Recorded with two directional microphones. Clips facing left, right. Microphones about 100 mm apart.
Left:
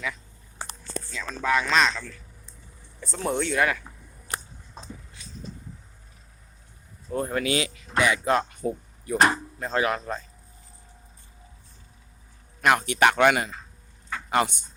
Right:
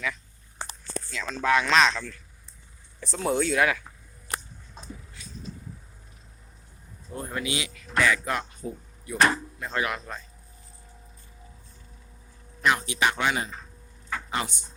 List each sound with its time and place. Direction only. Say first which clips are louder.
1.2 s speech: right 1 dB; centre (ahead or behind)
7.1 s speech: left 6 dB; 50° left (ahead or behind)
7.6 s speech: left 1 dB; 25° left (ahead or behind)
8.6 s speech: left 7 dB; 70° left (ahead or behind)
9.0 s speech: left 2 dB; 35° left (ahead or behind)
12.6 s speech: left 4 dB; 60° left (ahead or behind)
14.3 s speech: left 9 dB; 60° left (ahead or behind)